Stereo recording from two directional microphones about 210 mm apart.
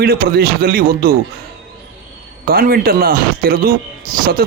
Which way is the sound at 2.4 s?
45° right (ahead or behind).